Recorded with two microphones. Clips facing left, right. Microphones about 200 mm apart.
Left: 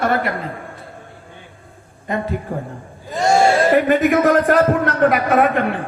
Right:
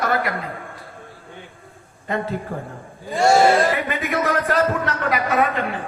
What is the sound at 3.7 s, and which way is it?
A man's voice, 45° left (ahead or behind).